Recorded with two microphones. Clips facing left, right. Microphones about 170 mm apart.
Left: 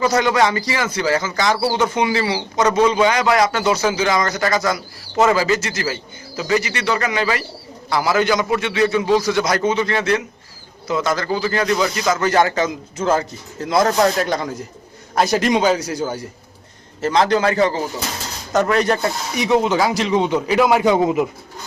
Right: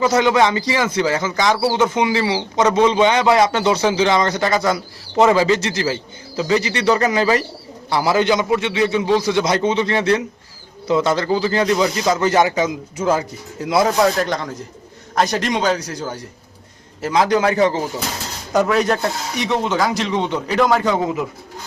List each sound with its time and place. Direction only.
0.0 s speech: 20° right (ahead or behind); by 16.2 s 5° left (ahead or behind)
17.0 s speech: 10° right (ahead or behind)
18.5 s speech: centre (ahead or behind); by 21.2 s 20° left (ahead or behind)